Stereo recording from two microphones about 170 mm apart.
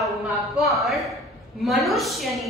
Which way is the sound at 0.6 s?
Centre (ahead or behind).